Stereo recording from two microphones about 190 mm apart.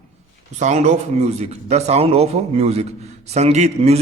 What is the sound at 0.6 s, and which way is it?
Speech, 40° right (ahead or behind).